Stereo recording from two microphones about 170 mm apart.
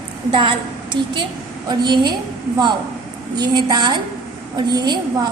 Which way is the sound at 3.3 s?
25° right (ahead or behind).